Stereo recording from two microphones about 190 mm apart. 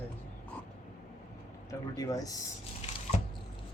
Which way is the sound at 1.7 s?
20° left (ahead or behind).